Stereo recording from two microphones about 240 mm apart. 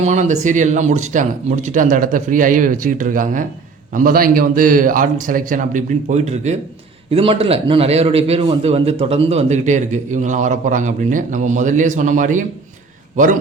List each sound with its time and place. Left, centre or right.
0.0 s a man's voice: right